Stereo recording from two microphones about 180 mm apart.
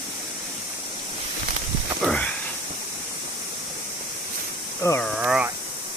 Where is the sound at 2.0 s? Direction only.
5° left (ahead or behind).